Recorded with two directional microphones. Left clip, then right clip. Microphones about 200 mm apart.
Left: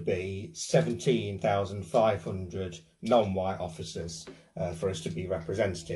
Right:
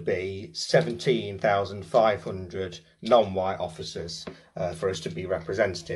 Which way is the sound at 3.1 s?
Centre (ahead or behind).